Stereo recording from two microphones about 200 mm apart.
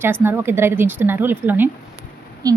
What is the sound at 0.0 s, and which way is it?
A woman's voice, 10° right (ahead or behind).